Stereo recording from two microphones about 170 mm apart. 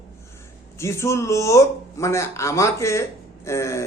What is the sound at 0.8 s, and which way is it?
Speech, 15° left (ahead or behind).